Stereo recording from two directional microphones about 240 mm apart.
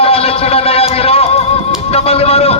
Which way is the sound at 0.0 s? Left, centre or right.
Left.